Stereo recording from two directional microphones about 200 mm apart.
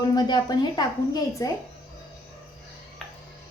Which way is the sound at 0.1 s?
20° left (ahead or behind).